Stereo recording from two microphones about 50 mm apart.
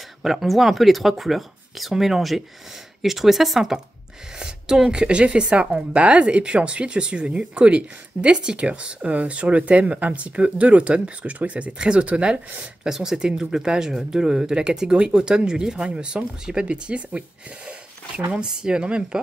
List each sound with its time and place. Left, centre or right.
0.2 s speech: centre; by 12.4 s right
12.8 s speech: centre
18.4 s speech: centre